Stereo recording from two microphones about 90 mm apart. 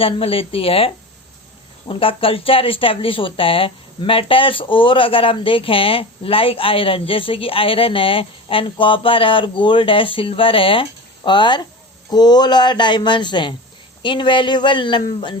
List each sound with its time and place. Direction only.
0.0 s speech: 90° left
1.9 s speech: 80° left
11.2 s speech: 60° left (ahead or behind)